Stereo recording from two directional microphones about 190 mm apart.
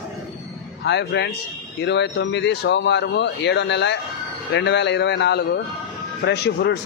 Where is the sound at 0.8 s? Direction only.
65° left (ahead or behind).